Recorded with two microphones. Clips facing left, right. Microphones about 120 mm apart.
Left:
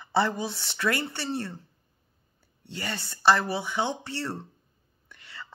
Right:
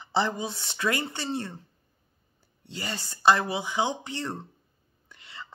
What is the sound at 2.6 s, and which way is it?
Speech, 60° left (ahead or behind).